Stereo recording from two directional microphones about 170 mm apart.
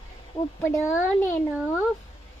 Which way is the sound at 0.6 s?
15° left (ahead or behind).